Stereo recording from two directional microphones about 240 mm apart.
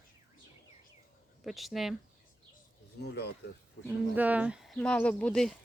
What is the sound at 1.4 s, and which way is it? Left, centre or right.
Speech, centre.